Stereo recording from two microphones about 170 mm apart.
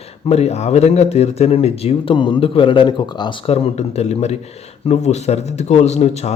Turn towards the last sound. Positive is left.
turn(degrees=40)  # may be behind; listen again after turning